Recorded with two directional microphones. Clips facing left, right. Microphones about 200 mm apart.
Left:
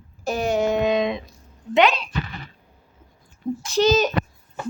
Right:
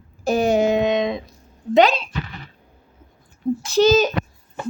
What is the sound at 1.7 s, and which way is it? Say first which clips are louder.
Speech: right 3 dB; 35° right (ahead or behind).